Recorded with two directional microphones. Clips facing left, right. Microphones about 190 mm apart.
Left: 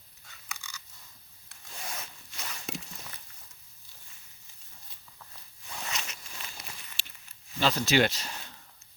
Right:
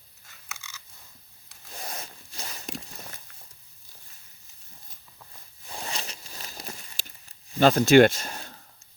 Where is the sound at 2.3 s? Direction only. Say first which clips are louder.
Right 2 dB; 35° right (ahead or behind).